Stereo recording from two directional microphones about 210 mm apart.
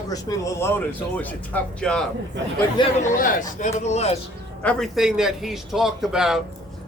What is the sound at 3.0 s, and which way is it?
A man's voice, 40° left (ahead or behind).